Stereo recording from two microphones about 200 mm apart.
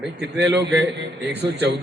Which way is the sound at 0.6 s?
60° right (ahead or behind).